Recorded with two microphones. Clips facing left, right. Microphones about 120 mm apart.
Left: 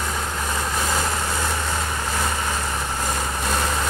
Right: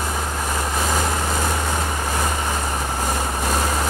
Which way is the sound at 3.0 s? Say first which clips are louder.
Right 2 dB; 10° right (ahead or behind).